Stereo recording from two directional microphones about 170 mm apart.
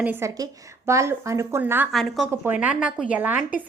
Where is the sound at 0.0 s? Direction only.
15° right (ahead or behind).